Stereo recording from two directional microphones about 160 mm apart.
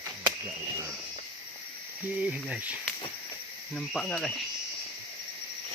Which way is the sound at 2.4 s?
10° right (ahead or behind).